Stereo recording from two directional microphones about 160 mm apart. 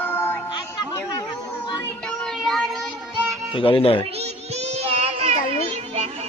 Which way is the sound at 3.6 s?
35° left (ahead or behind).